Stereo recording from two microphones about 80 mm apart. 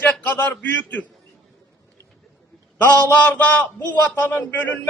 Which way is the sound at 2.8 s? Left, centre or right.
Centre.